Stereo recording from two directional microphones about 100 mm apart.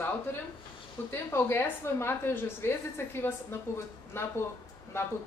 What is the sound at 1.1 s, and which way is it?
A woman's voice, 25° left (ahead or behind).